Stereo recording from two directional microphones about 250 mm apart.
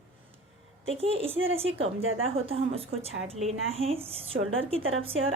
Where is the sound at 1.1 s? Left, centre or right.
Right.